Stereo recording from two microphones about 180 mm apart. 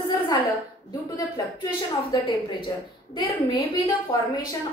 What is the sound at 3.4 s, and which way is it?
Speech, 20° left (ahead or behind).